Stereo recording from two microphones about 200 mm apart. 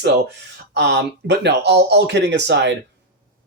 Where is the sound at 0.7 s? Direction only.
60° right (ahead or behind).